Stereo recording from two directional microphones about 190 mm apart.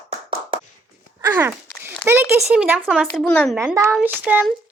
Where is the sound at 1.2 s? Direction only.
15° right (ahead or behind); by 3.5 s 5° left (ahead or behind).